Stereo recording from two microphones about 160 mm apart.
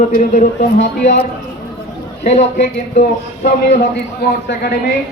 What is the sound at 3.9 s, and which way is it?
Speech, 80° left.